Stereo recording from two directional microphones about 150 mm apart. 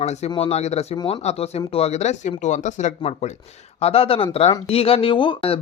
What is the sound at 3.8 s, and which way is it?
Speech, 40° left (ahead or behind).